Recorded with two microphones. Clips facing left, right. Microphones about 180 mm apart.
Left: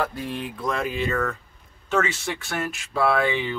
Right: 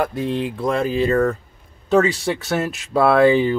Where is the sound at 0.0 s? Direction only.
20° right (ahead or behind).